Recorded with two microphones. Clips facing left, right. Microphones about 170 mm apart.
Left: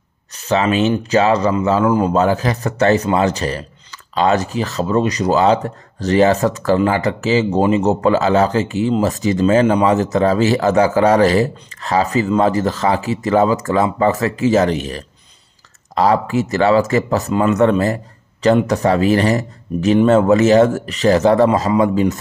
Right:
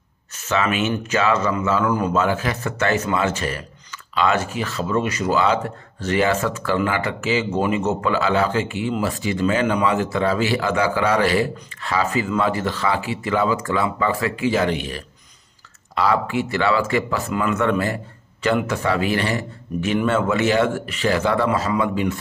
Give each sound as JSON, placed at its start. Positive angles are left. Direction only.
{"t": 0.3, "sound": "speech", "side_deg": 35}